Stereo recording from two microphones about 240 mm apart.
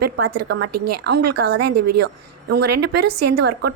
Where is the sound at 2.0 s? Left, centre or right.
Right.